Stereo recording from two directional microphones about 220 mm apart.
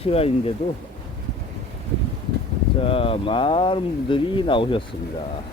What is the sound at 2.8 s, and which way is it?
Speech, 25° left (ahead or behind).